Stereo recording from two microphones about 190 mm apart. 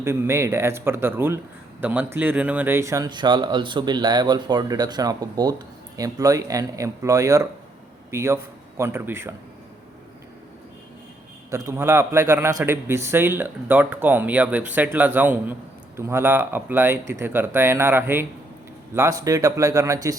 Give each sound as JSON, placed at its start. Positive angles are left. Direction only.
{"t": 0.0, "sound": "a man's voice", "side_deg": -15}
{"t": 11.5, "sound": "a man's voice", "side_deg": -15}